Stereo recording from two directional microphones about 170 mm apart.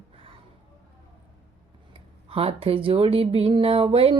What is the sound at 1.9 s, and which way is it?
Speech, 35° right (ahead or behind).